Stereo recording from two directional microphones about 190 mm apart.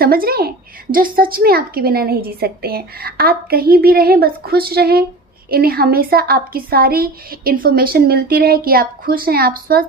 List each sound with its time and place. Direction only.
0.0 s a woman's voice: 50° right (ahead or behind)